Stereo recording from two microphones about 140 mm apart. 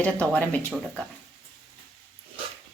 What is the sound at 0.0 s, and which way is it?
A woman's voice, 10° left (ahead or behind).